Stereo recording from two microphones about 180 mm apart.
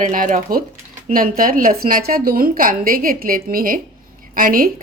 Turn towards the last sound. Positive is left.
turn(degrees=-50)  # may be behind; listen again after turning